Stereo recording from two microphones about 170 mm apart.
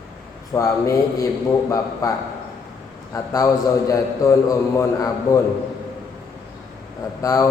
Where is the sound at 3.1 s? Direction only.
15° left (ahead or behind).